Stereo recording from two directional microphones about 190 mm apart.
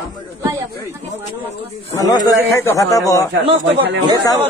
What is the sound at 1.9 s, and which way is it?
A man's voice, 20° left (ahead or behind).